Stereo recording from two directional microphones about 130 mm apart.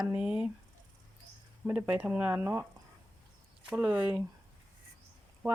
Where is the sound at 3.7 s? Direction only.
10° right (ahead or behind).